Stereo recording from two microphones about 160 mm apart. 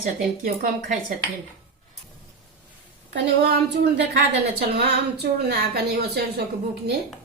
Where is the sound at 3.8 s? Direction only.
85° right.